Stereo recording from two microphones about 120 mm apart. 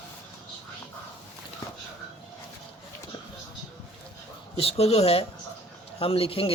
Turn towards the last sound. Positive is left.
turn(degrees=55)  # may be behind; listen again after turning